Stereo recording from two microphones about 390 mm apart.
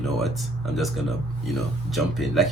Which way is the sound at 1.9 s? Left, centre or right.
Centre.